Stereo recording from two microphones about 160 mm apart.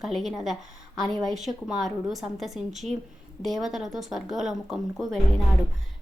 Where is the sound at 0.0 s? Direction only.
Centre (ahead or behind).